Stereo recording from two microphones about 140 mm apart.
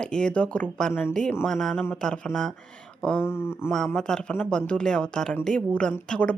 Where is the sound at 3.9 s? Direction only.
5° left (ahead or behind).